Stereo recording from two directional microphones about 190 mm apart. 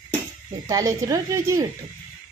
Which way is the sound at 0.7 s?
15° right (ahead or behind).